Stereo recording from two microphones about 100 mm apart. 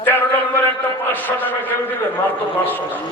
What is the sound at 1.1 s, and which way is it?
Speech, 20° left (ahead or behind).